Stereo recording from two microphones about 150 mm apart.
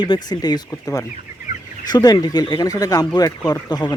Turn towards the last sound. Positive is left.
turn(degrees=25)  # may be behind; listen again after turning